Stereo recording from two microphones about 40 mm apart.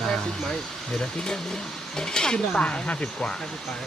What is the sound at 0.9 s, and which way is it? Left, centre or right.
Speech, centre.